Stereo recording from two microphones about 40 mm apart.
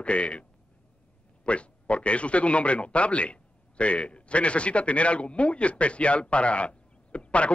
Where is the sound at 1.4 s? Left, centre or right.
Left.